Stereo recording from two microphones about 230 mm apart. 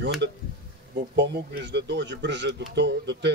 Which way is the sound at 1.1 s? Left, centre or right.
Right.